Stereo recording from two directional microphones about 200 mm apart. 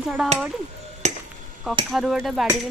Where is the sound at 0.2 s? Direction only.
Centre (ahead or behind).